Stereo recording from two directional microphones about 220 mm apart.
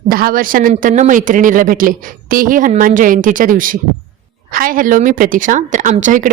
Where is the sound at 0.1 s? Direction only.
40° right (ahead or behind).